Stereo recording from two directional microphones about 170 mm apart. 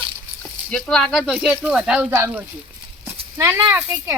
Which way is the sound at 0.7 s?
Centre (ahead or behind).